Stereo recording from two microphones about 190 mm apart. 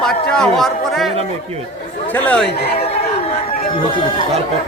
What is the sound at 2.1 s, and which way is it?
Speech, 10° left (ahead or behind).